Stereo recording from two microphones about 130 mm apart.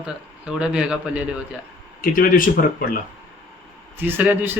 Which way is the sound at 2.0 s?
90° left.